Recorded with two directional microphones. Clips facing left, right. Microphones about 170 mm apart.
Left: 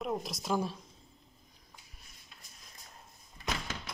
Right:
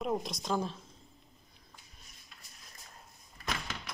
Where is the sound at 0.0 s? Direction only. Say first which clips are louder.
Right 2 dB; centre (ahead or behind).